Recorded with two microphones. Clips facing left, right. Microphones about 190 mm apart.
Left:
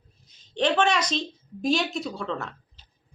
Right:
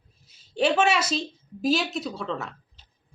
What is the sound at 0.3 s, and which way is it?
A woman's voice, 5° right (ahead or behind).